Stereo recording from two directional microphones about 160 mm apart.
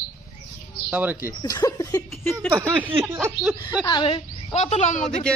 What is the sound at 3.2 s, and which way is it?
Speech, 10° right (ahead or behind).